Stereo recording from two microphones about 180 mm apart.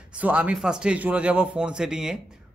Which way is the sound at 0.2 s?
5° right (ahead or behind).